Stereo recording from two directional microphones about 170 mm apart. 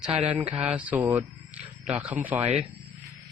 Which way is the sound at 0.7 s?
10° right (ahead or behind).